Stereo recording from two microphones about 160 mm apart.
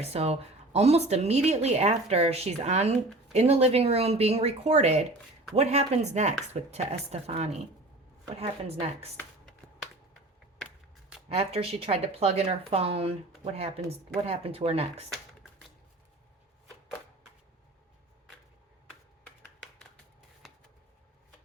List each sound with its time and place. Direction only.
0.0 s a woman's voice: 40° right (ahead or behind)
11.3 s speech: 35° right (ahead or behind)
20.4 s a sound: centre (ahead or behind)